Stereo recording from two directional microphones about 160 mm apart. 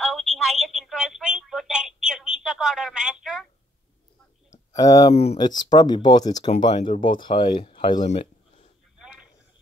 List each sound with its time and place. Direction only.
0.0 s telephone: centre (ahead or behind)
4.7 s speech: 20° left (ahead or behind)
5.1 s speech: 40° left (ahead or behind)
5.4 s speech: 25° left (ahead or behind)
6.7 s speech: 55° left (ahead or behind)
7.0 s speech: 30° left (ahead or behind)